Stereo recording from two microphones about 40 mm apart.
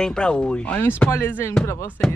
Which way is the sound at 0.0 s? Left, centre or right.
Left.